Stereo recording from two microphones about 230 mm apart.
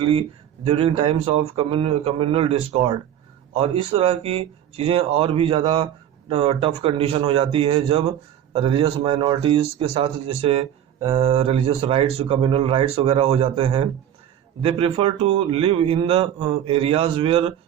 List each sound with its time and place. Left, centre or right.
0.0 s speech: right